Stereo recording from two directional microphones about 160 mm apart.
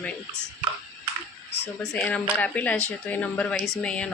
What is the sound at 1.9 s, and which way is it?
Speech, 10° left (ahead or behind).